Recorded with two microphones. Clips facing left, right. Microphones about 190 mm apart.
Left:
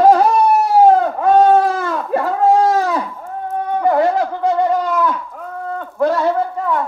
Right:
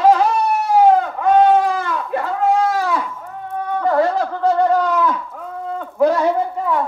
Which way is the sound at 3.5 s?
20° left (ahead or behind).